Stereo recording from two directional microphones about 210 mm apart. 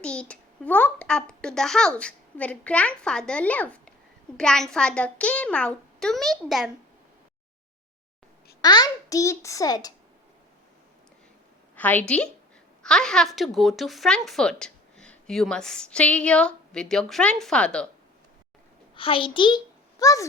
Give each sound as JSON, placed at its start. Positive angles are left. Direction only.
{"t": 0.0, "sound": "a sound", "side_deg": 5}
{"t": 2.0, "sound": "a woman's voice", "side_deg": 5}
{"t": 8.6, "sound": "a child's voice", "side_deg": 20}
{"t": 11.8, "sound": "a child's voice", "side_deg": 5}
{"t": 18.9, "sound": "a child's voice", "side_deg": 25}